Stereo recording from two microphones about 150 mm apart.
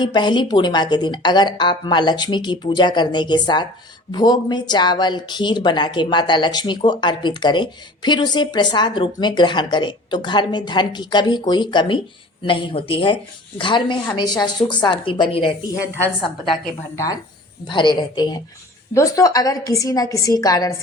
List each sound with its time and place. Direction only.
0.0 s speech: 30° left (ahead or behind)
16.9 s speech: 20° left (ahead or behind)
17.7 s speech: 30° left (ahead or behind)